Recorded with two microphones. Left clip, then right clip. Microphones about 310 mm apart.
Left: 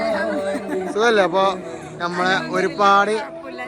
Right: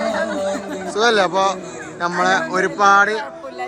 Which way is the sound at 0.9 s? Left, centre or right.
Centre.